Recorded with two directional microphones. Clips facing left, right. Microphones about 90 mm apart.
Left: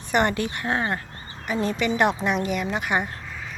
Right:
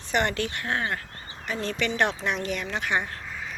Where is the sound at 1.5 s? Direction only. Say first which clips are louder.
Left 5 dB; 10° left (ahead or behind).